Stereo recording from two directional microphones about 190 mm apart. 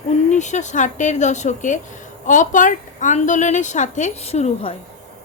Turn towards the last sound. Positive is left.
turn(degrees=35)  # may be behind; listen again after turning